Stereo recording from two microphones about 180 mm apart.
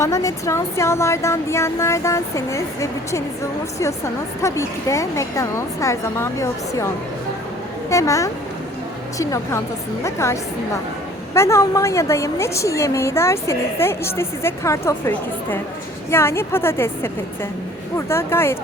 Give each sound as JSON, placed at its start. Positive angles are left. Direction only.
{"t": 0.0, "sound": "speech", "side_deg": 20}
{"t": 11.3, "sound": "speech", "side_deg": 15}